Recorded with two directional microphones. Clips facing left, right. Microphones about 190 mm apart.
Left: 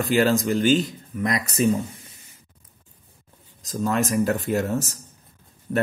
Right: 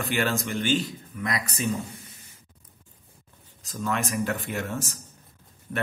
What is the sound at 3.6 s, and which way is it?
A man's voice, 40° left (ahead or behind).